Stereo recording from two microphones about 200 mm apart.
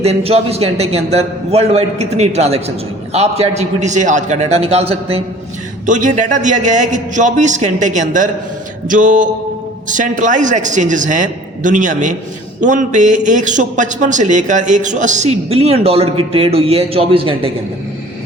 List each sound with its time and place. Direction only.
0.0 s a man's voice: 30° right (ahead or behind)